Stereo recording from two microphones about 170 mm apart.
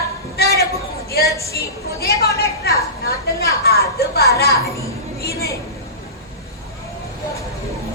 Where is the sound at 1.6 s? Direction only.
70° left (ahead or behind).